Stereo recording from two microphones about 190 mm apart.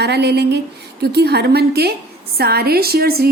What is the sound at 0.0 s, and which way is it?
Speech, 60° right (ahead or behind).